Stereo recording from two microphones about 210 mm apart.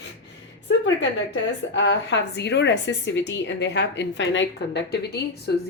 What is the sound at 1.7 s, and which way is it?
A woman's voice, 60° left (ahead or behind).